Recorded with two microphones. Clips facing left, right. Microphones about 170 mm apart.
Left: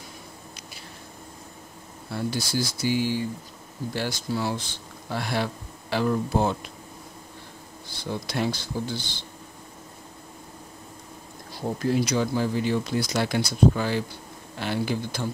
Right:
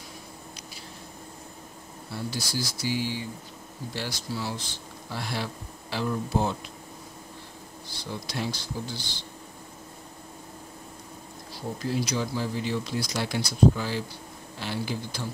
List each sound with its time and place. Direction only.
2.1 s speech: 55° left (ahead or behind)
8.1 s speech: 55° left (ahead or behind)
11.8 s speech: 55° left (ahead or behind)